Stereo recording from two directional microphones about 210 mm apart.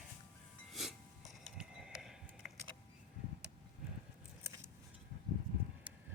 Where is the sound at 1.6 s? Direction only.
5° right (ahead or behind).